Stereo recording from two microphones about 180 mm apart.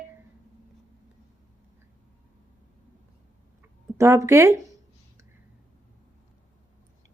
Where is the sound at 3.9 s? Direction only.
15° right (ahead or behind).